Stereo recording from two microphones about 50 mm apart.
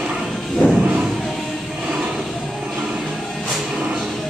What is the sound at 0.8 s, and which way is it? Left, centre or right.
Music, right.